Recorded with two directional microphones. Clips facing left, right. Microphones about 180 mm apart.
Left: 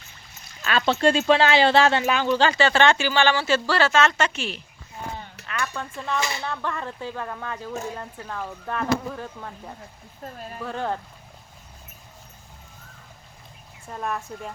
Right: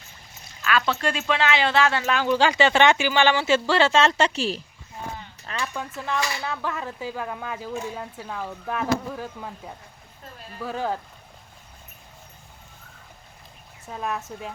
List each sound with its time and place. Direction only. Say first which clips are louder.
0.6 s speech: left 4 dB; 30° left (ahead or behind)
2.2 s speech: right 3 dB; 10° right (ahead or behind); by 4.6 s 35° right (ahead or behind)
5.4 s a sound: even; 70° left (ahead or behind)
5.7 s speech: even; 5° right (ahead or behind)
6.1 s speech: even; 25° left (ahead or behind)
6.4 s speech: even; 5° right (ahead or behind)
10.2 s speech: left 7 dB; 45° left (ahead or behind)
10.6 s speech: right 1 dB; 5° right (ahead or behind)
13.8 s speech: even; centre (ahead or behind)